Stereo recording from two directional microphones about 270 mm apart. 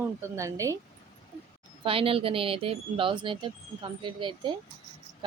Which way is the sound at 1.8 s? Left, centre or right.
Centre.